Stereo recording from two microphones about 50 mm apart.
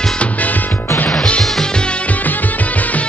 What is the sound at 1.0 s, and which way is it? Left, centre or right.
Music, left.